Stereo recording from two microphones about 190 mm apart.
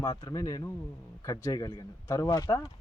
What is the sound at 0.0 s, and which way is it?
A man's voice, 20° left (ahead or behind).